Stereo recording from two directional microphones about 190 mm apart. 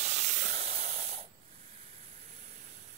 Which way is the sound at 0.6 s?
35° right (ahead or behind).